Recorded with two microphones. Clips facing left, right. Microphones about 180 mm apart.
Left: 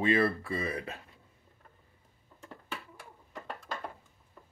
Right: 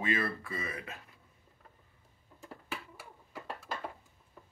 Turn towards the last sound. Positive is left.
turn(degrees=-5)  # may be behind; listen again after turning